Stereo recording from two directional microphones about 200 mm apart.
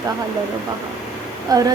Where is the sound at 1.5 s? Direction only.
20° right (ahead or behind).